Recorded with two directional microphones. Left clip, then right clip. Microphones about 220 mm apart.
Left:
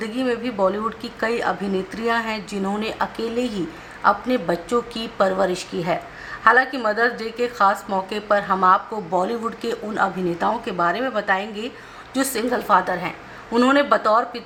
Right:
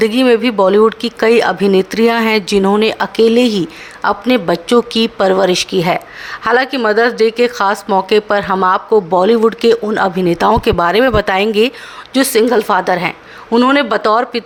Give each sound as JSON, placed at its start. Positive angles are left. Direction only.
{"t": 0.0, "sound": "speech", "side_deg": -45}